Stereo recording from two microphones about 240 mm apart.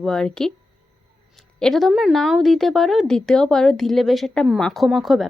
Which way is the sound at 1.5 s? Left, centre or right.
Centre.